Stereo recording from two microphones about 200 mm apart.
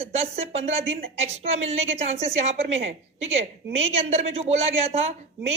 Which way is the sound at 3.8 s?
30° right (ahead or behind).